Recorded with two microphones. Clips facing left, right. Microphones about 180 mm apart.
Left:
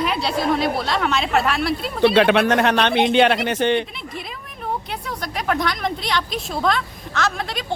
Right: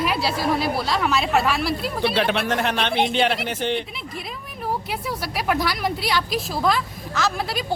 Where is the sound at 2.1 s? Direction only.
65° left (ahead or behind).